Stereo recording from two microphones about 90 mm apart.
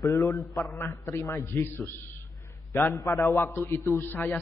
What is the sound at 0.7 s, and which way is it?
A man's voice, 30° left (ahead or behind).